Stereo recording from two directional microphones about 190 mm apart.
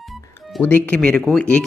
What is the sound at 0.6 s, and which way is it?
Speech, 10° left (ahead or behind).